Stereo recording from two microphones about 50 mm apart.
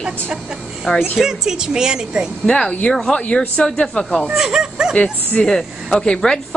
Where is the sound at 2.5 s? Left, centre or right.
Centre.